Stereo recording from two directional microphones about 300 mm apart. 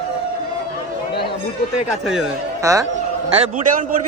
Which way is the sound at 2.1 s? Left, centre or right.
Centre.